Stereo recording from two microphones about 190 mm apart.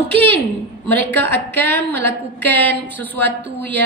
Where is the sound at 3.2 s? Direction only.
65° right (ahead or behind).